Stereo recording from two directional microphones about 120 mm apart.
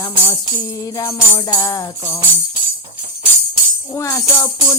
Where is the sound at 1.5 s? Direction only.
30° left (ahead or behind).